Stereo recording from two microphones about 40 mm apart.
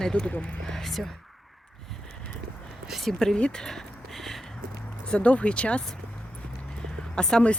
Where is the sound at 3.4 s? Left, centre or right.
Left.